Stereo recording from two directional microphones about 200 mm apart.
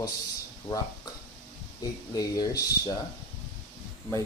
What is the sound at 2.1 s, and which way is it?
Speech, 20° left (ahead or behind).